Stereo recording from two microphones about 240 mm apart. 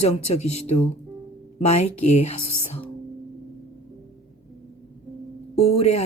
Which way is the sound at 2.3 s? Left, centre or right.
Left.